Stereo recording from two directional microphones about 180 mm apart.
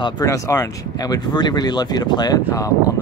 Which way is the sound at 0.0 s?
20° left (ahead or behind).